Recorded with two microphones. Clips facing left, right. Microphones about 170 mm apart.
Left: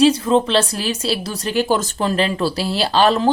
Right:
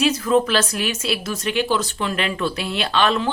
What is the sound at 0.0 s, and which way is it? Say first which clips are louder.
Speech: left 4 dB; 30° left (ahead or behind).